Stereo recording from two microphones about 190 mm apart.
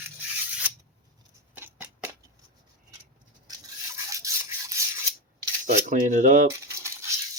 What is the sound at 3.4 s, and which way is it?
Rub, 20° right (ahead or behind).